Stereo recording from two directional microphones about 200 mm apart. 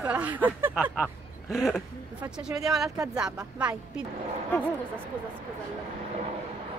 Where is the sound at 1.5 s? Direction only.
Centre (ahead or behind).